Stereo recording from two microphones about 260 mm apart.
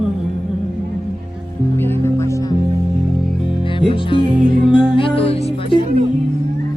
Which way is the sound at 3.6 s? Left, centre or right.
Centre.